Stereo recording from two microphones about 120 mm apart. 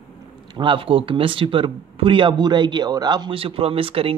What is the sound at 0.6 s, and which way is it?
Speech, 45° right (ahead or behind).